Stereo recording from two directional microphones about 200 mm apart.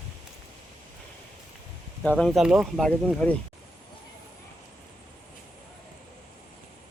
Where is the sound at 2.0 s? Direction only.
5° left (ahead or behind).